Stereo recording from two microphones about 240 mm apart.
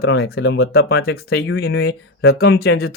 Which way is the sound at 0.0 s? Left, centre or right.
Left.